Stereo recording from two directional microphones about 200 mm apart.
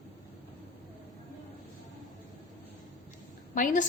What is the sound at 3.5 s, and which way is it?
Speech, 40° left (ahead or behind).